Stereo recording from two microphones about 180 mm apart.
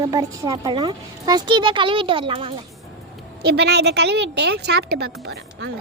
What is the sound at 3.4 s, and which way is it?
A woman's voice, 65° right (ahead or behind).